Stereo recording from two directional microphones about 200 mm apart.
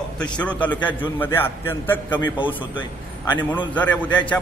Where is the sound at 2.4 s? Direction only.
25° left (ahead or behind).